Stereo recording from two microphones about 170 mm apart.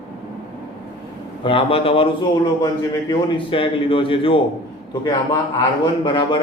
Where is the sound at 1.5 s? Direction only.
35° left (ahead or behind).